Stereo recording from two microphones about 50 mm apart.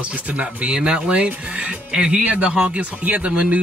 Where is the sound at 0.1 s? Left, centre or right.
Right.